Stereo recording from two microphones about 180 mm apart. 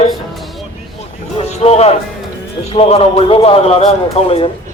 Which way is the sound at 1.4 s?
35° left (ahead or behind).